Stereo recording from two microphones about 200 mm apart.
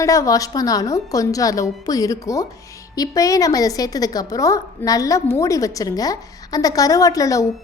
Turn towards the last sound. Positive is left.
turn(degrees=15)  # may be behind; listen again after turning